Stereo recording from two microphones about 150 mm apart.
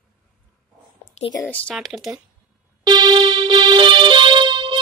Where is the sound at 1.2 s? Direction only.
50° left (ahead or behind).